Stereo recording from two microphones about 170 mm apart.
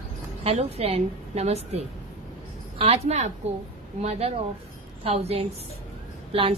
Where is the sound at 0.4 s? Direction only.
35° right (ahead or behind).